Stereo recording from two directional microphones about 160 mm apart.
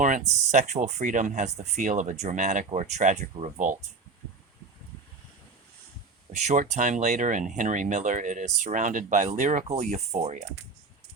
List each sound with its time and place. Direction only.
0.0 s speech: 45° right (ahead or behind)
6.5 s speech: 50° right (ahead or behind)